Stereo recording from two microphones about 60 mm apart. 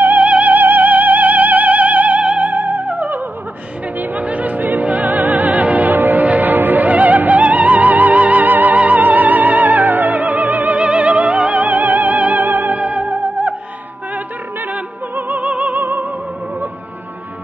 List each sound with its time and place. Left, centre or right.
0.0 s music: right
4.0 s opera: right
14.7 s opera: right
15.8 s music: right